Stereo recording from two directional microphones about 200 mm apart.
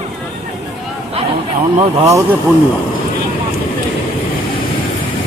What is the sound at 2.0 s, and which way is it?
Speech, 15° right (ahead or behind).